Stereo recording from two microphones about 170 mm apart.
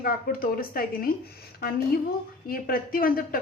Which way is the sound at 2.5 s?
60° left (ahead or behind).